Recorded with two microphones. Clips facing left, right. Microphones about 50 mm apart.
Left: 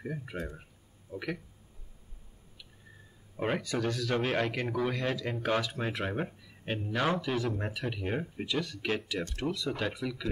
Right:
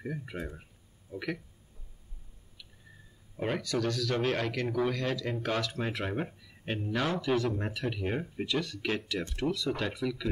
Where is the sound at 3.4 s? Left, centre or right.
Centre.